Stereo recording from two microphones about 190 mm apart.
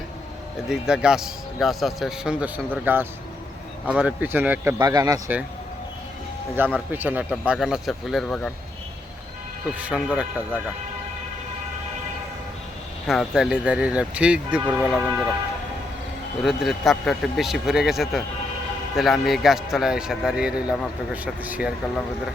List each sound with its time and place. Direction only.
0.7 s a man's voice: 5° right (ahead or behind); by 5.2 s 20° right (ahead or behind)
6.6 s speech: 10° right (ahead or behind)
9.7 s speech: 5° right (ahead or behind)
13.1 s speech: centre (ahead or behind)
16.4 s speech: centre (ahead or behind)